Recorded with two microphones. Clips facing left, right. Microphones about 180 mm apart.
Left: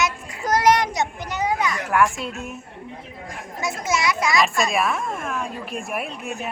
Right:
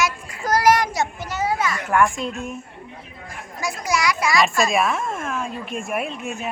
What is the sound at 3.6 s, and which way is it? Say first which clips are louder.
Speech: right 1 dB; 25° left (ahead or behind).